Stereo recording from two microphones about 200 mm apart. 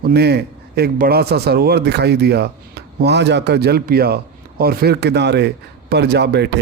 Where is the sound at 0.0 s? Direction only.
55° right (ahead or behind).